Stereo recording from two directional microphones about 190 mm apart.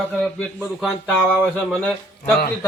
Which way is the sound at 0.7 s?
Centre (ahead or behind).